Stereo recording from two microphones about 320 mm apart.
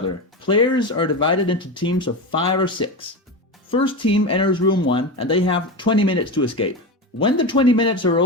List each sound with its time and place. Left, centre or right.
0.4 s speech: centre